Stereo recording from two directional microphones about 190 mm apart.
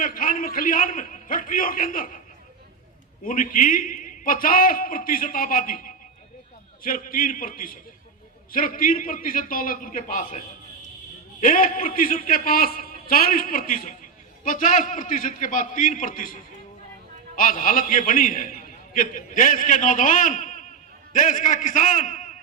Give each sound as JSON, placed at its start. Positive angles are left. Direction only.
{"t": 0.0, "sound": "a man's voice", "side_deg": 45}
{"t": 3.2, "sound": "a man's voice", "side_deg": 45}